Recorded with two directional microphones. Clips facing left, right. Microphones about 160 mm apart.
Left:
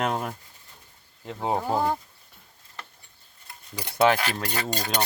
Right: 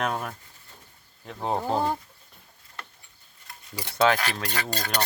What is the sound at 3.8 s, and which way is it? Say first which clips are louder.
Speech: left 1 dB; 15° left (ahead or behind).